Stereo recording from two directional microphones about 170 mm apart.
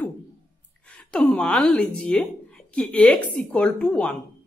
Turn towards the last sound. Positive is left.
turn(degrees=5)  # may be behind; listen again after turning